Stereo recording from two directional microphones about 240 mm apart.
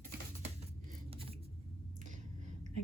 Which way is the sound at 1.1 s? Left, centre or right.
Right.